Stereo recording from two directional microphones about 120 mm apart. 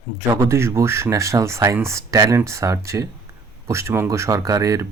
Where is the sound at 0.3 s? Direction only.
25° right (ahead or behind).